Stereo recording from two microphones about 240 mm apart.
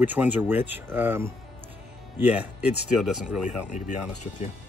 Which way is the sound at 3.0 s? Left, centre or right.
Centre.